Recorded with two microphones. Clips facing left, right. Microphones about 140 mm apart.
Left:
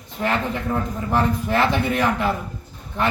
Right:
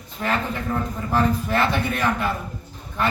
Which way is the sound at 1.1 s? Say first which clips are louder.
Left 1 dB; 20° left (ahead or behind).